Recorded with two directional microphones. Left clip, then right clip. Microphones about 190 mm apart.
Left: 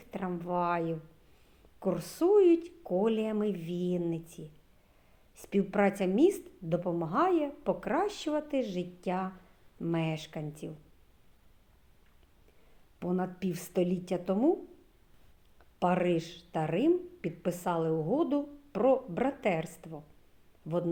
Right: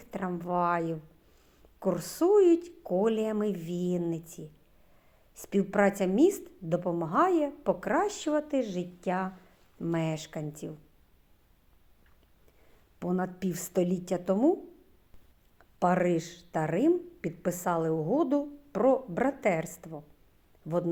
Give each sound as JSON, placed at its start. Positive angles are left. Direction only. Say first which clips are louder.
{"t": 0.0, "sound": "a woman's voice", "louder": "right 2 dB", "side_deg": -25}
{"t": 13.0, "sound": "speech", "louder": "right 2 dB", "side_deg": -25}
{"t": 15.5, "sound": "speech", "louder": "right 3 dB", "side_deg": -25}